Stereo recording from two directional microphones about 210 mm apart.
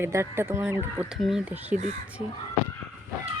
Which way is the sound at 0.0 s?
10° right (ahead or behind).